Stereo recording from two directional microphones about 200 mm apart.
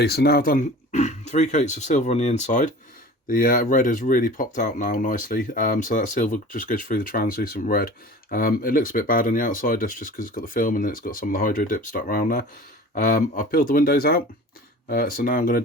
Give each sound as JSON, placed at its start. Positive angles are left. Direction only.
{"t": 0.0, "sound": "speech", "side_deg": 55}